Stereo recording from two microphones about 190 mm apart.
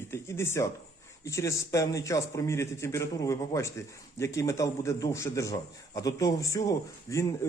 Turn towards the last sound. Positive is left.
turn(degrees=15)  # may be behind; listen again after turning